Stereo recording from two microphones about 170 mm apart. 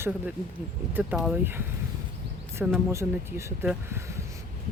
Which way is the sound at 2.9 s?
15° right (ahead or behind).